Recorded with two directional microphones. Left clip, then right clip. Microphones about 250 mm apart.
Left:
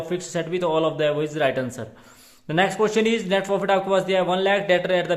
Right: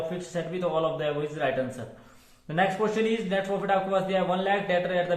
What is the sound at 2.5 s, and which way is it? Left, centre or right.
A man's voice, left.